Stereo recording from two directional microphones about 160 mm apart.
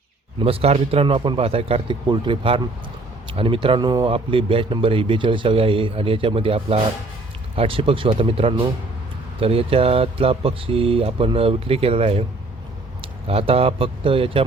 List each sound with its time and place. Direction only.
0.4 s speech: 35° right (ahead or behind)
13.2 s speech: 35° right (ahead or behind)